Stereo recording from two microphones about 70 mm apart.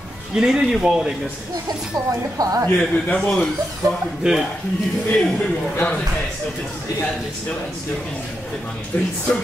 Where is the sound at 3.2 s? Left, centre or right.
Centre.